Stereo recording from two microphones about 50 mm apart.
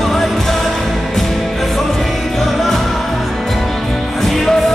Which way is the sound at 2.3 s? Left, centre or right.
Centre.